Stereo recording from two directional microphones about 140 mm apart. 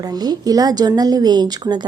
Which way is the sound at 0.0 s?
30° right (ahead or behind).